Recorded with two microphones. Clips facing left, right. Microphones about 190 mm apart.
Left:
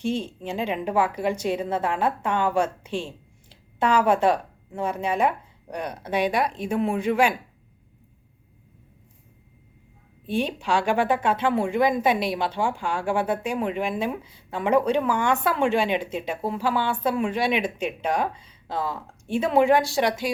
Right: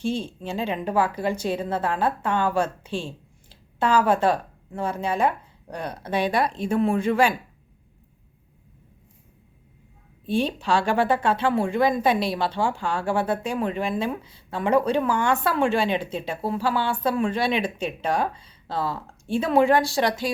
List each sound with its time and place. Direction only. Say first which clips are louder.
0.0 s a woman's voice: even; 20° left (ahead or behind)
10.2 s speech: right 2 dB; 15° left (ahead or behind)